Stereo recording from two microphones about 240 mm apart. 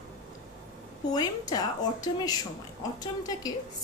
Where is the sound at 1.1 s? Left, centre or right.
Centre.